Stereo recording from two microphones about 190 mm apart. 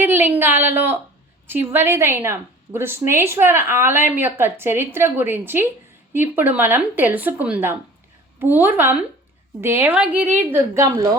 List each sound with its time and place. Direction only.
0.0 s a woman's voice: 10° right (ahead or behind)